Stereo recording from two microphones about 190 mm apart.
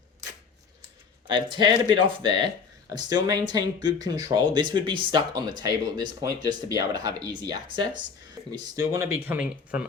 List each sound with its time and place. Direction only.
1.3 s speech: 25° right (ahead or behind); by 9.8 s 10° right (ahead or behind)